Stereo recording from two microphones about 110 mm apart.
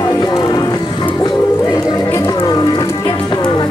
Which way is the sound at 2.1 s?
30° left (ahead or behind).